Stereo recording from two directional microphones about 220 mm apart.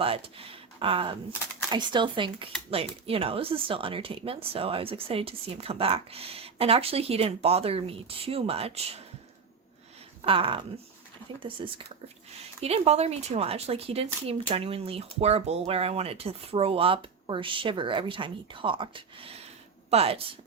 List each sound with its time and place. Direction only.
0.0 s speech: 25° right (ahead or behind)
10.2 s speech: 25° right (ahead or behind)